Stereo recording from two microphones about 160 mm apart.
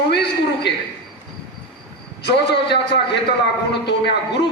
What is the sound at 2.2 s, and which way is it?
Speech, 90° left.